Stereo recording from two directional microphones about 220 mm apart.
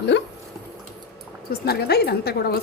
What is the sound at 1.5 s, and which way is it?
A woman's voice, 45° left (ahead or behind).